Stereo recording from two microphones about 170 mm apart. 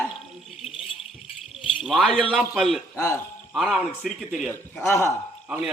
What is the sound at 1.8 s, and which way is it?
A man's voice, centre (ahead or behind).